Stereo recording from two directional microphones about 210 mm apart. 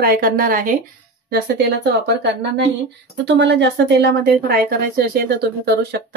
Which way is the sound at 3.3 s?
55° right (ahead or behind).